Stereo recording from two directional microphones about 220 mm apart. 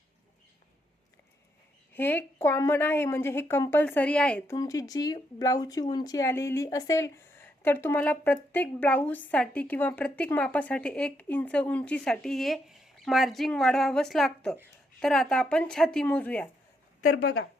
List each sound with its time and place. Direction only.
1.9 s a woman's voice: 10° left (ahead or behind)
17.2 s a woman's voice: 45° left (ahead or behind)